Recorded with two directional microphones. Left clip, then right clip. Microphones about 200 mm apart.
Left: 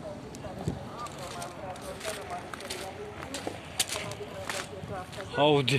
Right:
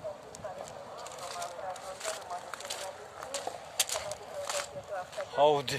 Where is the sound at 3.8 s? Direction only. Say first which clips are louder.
Left 1 dB; 10° right (ahead or behind).